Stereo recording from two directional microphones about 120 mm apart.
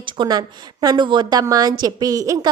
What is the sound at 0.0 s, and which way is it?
A woman's voice, 40° right (ahead or behind).